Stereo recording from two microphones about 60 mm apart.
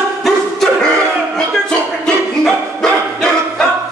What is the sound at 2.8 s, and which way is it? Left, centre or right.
Bow-wow, centre.